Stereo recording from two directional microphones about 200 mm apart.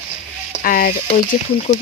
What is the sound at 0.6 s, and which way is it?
Speech, 45° left (ahead or behind).